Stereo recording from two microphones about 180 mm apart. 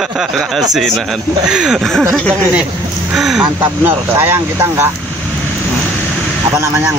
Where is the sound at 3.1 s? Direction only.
Centre (ahead or behind).